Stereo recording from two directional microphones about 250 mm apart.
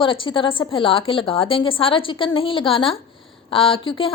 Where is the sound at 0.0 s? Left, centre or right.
Centre.